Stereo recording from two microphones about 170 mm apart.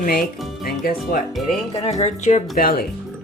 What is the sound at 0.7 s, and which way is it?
Speech, 60° left (ahead or behind).